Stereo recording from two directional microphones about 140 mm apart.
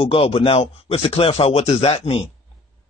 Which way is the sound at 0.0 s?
40° left (ahead or behind).